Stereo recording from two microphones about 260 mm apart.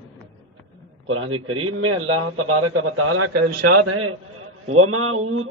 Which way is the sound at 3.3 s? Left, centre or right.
Right.